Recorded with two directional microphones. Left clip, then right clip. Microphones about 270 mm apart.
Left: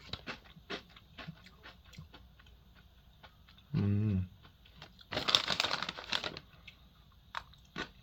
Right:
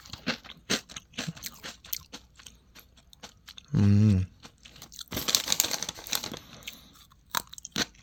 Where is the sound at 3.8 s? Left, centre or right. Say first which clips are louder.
Right 11 dB; right.